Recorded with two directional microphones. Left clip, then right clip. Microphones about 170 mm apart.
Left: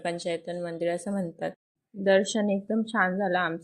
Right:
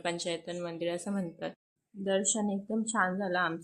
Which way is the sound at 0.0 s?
15° left (ahead or behind).